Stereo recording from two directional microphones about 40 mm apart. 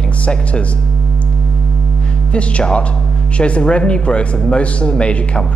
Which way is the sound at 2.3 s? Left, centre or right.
Left.